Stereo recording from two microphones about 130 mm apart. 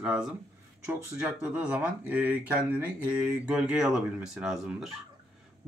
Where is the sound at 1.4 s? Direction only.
10° right (ahead or behind).